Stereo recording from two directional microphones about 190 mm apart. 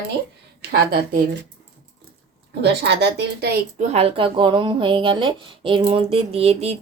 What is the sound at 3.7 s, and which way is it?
Speech, 35° right (ahead or behind).